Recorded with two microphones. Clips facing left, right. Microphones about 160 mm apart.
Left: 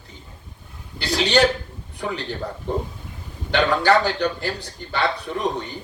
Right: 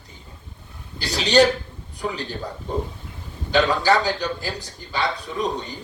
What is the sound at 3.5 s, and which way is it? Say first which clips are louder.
A man's voice: left 1 dB; 60° left (ahead or behind).